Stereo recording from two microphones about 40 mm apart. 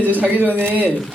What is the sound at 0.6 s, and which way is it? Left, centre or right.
Speech, right.